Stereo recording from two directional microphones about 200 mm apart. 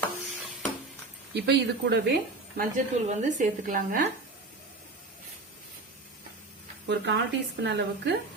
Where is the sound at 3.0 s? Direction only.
40° right (ahead or behind).